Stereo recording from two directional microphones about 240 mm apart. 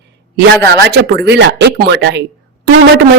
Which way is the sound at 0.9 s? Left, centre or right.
Right.